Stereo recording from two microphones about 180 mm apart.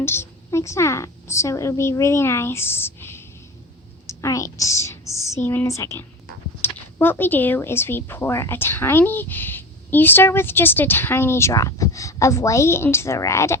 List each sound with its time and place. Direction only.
0.0 s speech: 15° left (ahead or behind)